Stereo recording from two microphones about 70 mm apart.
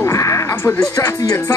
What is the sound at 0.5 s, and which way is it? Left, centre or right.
Speech, left.